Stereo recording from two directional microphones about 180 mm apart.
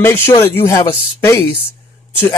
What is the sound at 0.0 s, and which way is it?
Speech, 15° left (ahead or behind).